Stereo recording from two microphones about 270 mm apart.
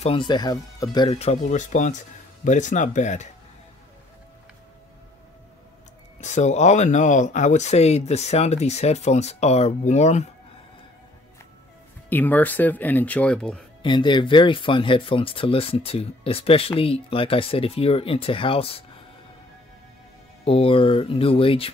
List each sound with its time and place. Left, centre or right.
0.0 s speech: centre
6.2 s speech: left
12.1 s speech: centre
13.8 s speech: centre
20.4 s speech: centre